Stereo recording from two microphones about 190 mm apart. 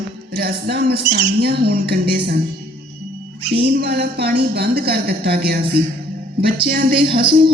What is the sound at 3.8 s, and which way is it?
Speech, 60° right (ahead or behind).